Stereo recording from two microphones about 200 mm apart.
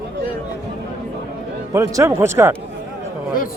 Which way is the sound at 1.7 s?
15° right (ahead or behind).